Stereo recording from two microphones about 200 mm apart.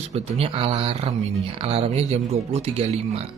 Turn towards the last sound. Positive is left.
turn(degrees=-30)  # may be behind; listen again after turning